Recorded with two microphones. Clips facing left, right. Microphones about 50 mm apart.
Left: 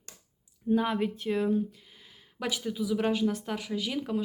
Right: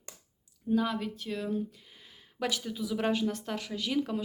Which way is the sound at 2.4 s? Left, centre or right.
Centre.